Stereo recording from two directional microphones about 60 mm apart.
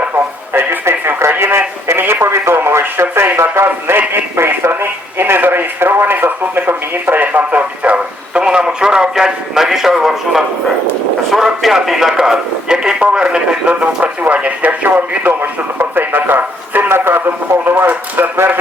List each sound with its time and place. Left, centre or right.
0.5 s radio: right
3.4 s a sound: right
4.8 s radio: right; by 10.4 s centre
11.3 s a man's voice: centre
13.2 s radio: centre; by 17.2 s right
17.7 s a sound: right